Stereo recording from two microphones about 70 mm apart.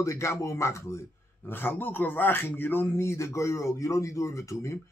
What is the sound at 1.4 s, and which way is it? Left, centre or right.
Speech, left.